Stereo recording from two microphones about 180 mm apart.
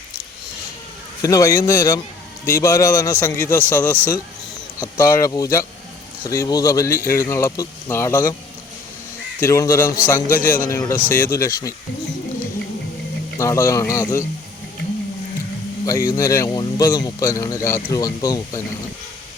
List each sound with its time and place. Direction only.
1.2 s speech: 20° left (ahead or behind)
9.4 s speech: 15° left (ahead or behind)
10.3 s a man's voice: 50° left (ahead or behind)
10.6 s speech: 15° left (ahead or behind)
13.4 s speech: 15° left (ahead or behind)
15.9 s speech: 20° left (ahead or behind)